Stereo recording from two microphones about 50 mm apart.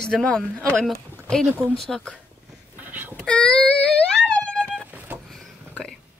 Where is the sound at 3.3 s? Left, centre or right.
Centre.